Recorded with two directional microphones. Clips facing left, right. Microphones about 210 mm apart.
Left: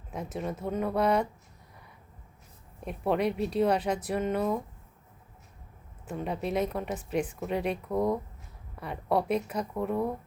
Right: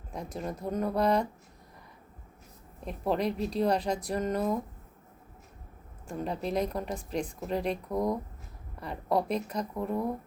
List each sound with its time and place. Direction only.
0.1 s a woman's voice: 5° left (ahead or behind)
2.8 s a woman's voice: 5° left (ahead or behind)
6.1 s a woman's voice: 5° left (ahead or behind)